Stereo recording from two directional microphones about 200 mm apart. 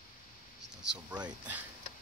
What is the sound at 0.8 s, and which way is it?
Speech, 5° right (ahead or behind).